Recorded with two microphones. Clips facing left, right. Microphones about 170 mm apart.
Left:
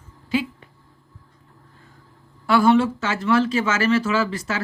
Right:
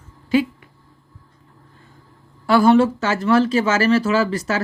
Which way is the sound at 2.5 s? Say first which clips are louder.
Right 3 dB; 40° right (ahead or behind).